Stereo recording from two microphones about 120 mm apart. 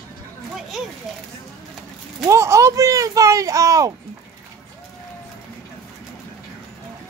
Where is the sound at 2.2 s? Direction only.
25° right (ahead or behind).